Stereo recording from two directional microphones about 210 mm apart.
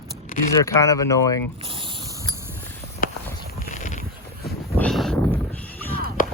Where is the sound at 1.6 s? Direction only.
25° right (ahead or behind).